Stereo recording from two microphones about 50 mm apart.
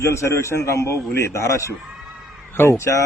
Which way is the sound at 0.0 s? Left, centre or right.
Left.